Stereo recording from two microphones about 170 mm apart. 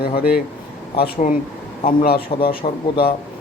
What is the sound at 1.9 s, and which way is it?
Speech, 65° left (ahead or behind).